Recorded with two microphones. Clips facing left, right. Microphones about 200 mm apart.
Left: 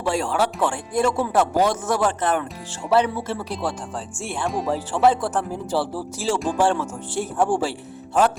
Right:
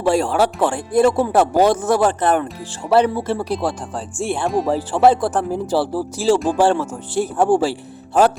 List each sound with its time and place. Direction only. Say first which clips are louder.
0.0 s speech: right 6 dB; 35° right (ahead or behind)